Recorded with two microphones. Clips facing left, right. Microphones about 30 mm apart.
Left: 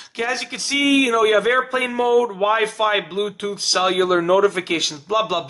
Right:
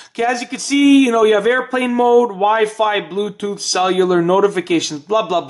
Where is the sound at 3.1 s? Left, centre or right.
Left.